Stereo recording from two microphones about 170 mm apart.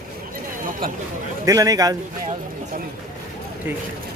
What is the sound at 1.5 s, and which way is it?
Speech, 20° right (ahead or behind).